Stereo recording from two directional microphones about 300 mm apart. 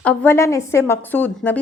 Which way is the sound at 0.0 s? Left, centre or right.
Centre.